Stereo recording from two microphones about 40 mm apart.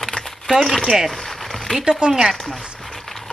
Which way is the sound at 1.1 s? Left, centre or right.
Centre.